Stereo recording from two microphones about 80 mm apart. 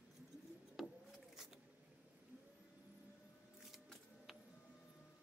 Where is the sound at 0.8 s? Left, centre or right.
Centre.